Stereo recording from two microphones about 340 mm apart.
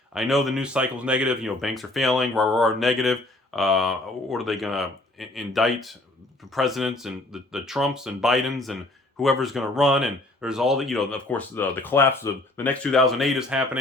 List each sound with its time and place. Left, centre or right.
0.1 s speech: centre